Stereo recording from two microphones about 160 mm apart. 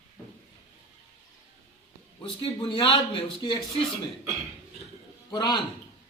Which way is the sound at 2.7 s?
30° left (ahead or behind).